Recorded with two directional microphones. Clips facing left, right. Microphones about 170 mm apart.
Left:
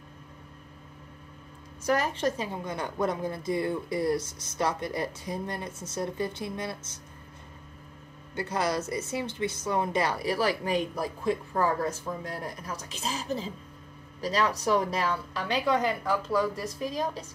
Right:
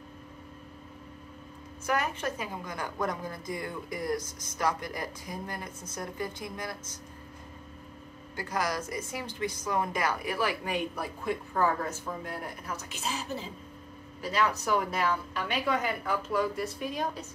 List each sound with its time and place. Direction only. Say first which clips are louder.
1.9 s a woman's voice: left 4 dB; 35° left (ahead or behind)
8.4 s a woman's voice: left 3 dB; 25° left (ahead or behind)